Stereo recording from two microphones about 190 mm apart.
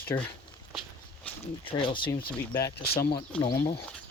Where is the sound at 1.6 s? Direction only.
25° left (ahead or behind).